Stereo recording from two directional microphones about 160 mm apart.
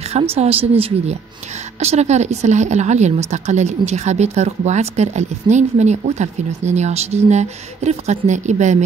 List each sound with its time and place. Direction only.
0.1 s a woman's voice: 40° right (ahead or behind)